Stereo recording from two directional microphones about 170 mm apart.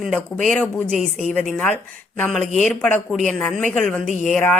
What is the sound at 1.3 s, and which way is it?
Speech, 5° left (ahead or behind).